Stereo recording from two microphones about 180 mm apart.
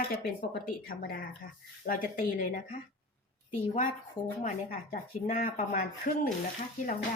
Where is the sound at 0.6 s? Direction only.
55° left (ahead or behind).